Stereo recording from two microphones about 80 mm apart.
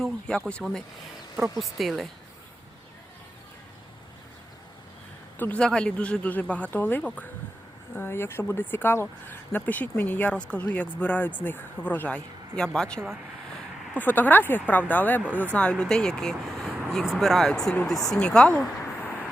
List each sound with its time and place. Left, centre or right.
0.0 s speech: centre
5.4 s speech: centre
13.9 s speech: left
18.9 s vehicle: left